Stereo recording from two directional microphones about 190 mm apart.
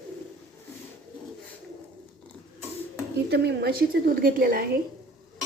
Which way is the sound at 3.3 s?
60° right (ahead or behind).